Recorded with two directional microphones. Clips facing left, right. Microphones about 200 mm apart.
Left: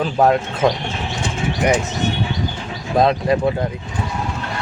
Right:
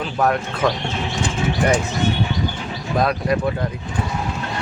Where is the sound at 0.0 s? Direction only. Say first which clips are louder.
Left 4 dB; 25° left (ahead or behind).